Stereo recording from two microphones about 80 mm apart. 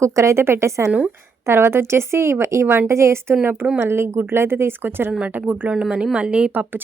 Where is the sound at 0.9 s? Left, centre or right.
Centre.